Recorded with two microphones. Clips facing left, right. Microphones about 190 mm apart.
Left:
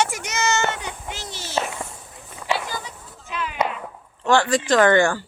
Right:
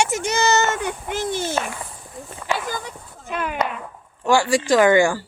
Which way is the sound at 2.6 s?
50° right (ahead or behind).